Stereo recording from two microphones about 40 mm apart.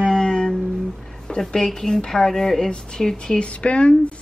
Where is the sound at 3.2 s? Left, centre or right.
Left.